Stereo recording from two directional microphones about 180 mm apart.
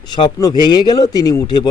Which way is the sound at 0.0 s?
25° left (ahead or behind).